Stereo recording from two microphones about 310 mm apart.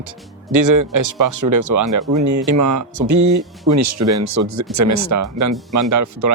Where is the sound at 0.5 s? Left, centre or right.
Right.